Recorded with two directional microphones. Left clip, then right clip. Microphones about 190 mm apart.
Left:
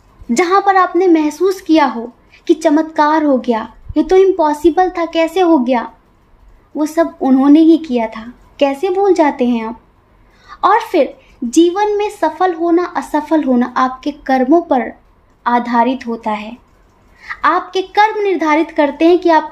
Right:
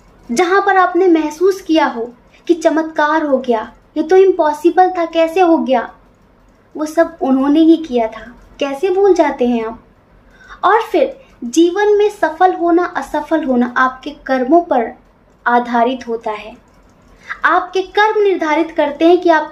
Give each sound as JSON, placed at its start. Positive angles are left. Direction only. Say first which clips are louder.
{"t": 0.3, "sound": "a woman's voice", "louder": "left 1 dB", "side_deg": 45}
{"t": 15.4, "sound": "a woman's voice", "louder": "even", "side_deg": 45}